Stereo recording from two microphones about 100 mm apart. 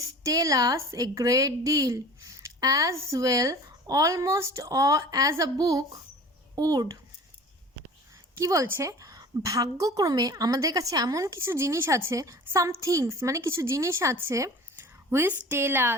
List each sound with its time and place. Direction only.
0.2 s a woman's voice: 35° right (ahead or behind)
8.4 s a woman's voice: 30° right (ahead or behind)